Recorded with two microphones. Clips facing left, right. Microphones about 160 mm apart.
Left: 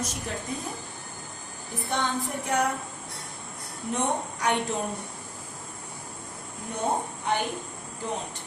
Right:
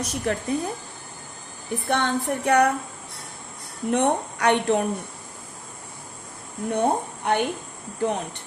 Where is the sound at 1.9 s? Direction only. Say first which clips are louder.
Right 5 dB; 65° right (ahead or behind).